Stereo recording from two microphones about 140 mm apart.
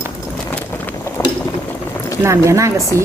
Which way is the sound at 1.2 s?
15° left (ahead or behind).